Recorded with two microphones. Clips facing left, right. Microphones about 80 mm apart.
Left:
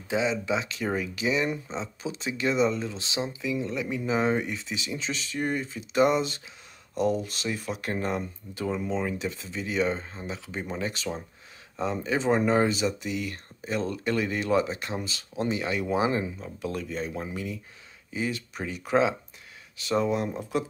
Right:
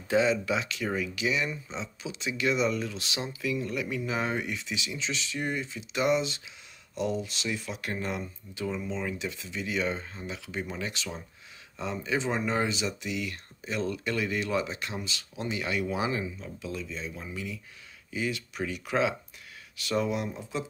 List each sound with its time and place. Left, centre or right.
0.1 s speech: centre; by 16.5 s left
16.5 s speech: left